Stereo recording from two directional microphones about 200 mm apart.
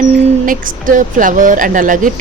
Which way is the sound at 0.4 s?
45° right (ahead or behind).